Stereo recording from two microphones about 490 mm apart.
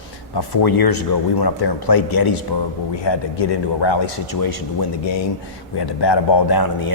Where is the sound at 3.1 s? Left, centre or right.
Left.